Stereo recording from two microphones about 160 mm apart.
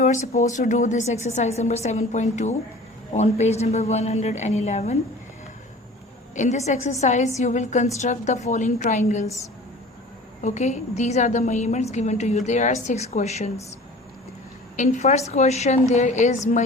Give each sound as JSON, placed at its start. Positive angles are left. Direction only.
{"t": 0.0, "sound": "a woman's voice", "side_deg": 50}
{"t": 6.3, "sound": "a woman's voice", "side_deg": 50}
{"t": 10.4, "sound": "a woman's voice", "side_deg": 45}
{"t": 14.8, "sound": "a woman's voice", "side_deg": 45}